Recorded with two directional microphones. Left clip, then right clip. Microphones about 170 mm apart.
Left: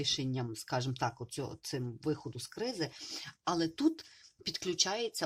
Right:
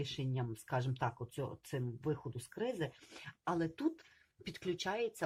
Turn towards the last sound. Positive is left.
turn(degrees=30)  # may be behind; listen again after turning